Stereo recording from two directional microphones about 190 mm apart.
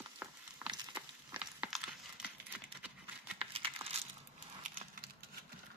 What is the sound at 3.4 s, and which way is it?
Crushing, 30° right (ahead or behind).